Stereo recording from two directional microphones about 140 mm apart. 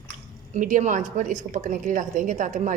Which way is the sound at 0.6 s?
70° right (ahead or behind).